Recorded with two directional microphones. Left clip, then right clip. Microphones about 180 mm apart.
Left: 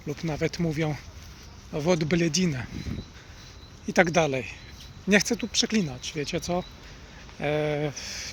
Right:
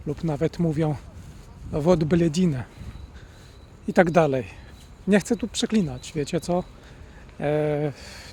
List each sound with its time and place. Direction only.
0.1 s speech: 30° right (ahead or behind)
3.8 s speech: 35° right (ahead or behind)